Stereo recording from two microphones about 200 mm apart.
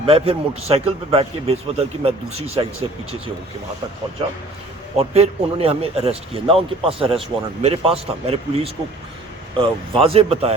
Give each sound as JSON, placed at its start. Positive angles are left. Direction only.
{"t": 0.0, "sound": "a man's voice", "side_deg": -30}
{"t": 4.9, "sound": "a man's voice", "side_deg": -30}